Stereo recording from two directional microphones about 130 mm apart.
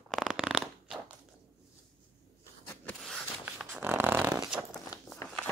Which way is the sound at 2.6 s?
10° left (ahead or behind).